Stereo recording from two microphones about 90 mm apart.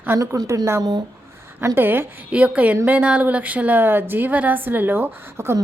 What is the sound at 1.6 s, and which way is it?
A woman's voice, 25° right (ahead or behind).